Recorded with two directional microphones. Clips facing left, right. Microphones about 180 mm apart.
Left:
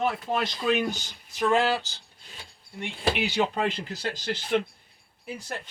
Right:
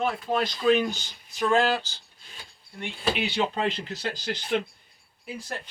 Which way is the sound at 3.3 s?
10° left (ahead or behind).